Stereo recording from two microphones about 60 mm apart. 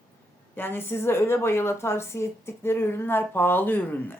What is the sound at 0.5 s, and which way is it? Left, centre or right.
A woman's voice, left.